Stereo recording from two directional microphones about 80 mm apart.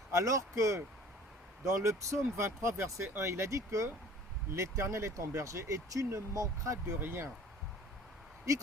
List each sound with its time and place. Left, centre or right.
0.1 s speech: right
6.8 s speech: right